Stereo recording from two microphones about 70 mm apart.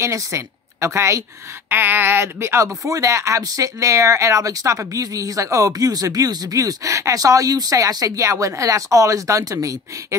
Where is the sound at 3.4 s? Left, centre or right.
Right.